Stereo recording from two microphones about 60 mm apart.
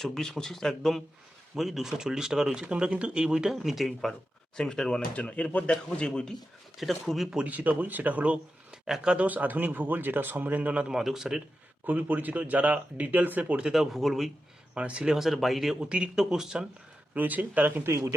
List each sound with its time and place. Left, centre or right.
0.0 s speech: centre
4.5 s speech: centre
6.8 s speech: centre
7.4 s speech: right
8.7 s speech: centre
11.0 s speech: centre
11.9 s speech: right
13.7 s speech: centre
14.8 s speech: centre
15.1 s speech: centre
15.8 s speech: centre
17.2 s speech: right
17.8 s speech: right